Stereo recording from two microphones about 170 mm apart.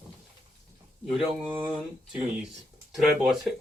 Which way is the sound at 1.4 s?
30° right (ahead or behind).